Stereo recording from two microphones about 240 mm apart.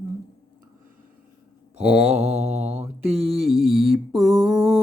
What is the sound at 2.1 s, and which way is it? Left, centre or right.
Mantra, right.